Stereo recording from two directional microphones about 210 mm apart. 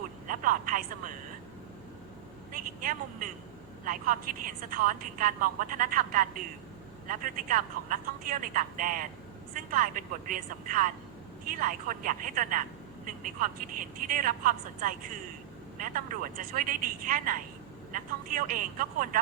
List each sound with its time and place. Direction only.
0.3 s a woman's voice: 40° right (ahead or behind)
2.5 s a woman's voice: 40° right (ahead or behind)